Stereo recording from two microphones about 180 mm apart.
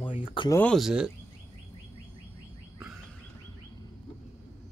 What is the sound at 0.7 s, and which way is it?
Speech, 5° right (ahead or behind).